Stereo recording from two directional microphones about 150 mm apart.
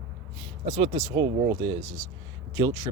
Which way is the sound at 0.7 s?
35° right (ahead or behind).